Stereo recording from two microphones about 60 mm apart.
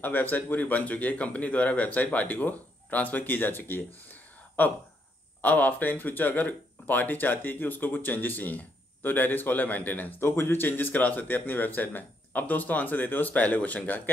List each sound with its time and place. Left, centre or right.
0.0 s a man's voice: left
10.2 s a man's voice: left